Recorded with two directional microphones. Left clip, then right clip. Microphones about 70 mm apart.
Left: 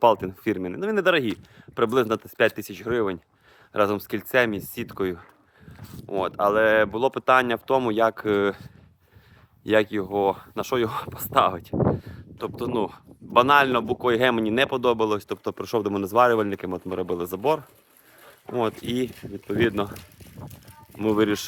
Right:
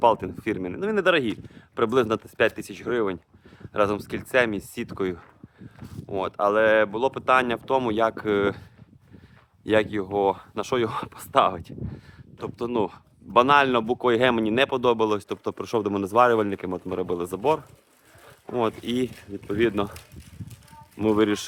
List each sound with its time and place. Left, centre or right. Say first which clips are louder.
0.0 s speech: left 1 dB; left
3.7 s speech: left 1 dB; left
6.3 s speech: even; left
9.6 s speech: left 1 dB; left
10.8 s speech: even; left
11.1 s speech: even; left
13.7 s speech: right 1 dB; centre
18.5 s speech: even; centre
19.1 s speech: left 1 dB; left
21.1 s speech: even; centre